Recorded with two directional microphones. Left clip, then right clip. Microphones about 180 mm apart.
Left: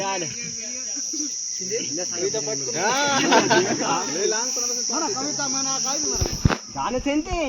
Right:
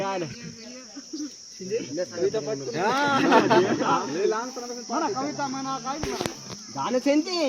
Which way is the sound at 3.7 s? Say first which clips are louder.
Even; centre (ahead or behind).